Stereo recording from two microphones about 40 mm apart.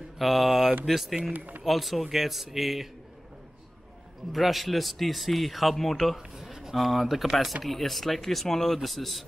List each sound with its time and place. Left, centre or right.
0.2 s a man's voice: centre
1.3 s speech: right
1.6 s a man's voice: centre
4.3 s a man's voice: centre
6.1 s a sound: centre
6.9 s a man's voice: centre